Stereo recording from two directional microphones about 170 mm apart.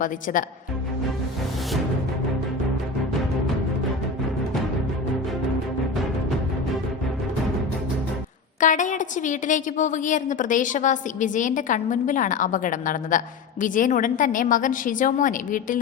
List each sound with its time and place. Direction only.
0.0 s a woman's voice: 50° left (ahead or behind)
8.6 s a woman's voice: 50° left (ahead or behind)